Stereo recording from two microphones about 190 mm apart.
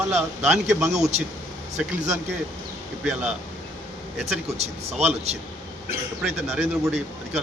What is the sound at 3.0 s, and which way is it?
Speech, 5° right (ahead or behind).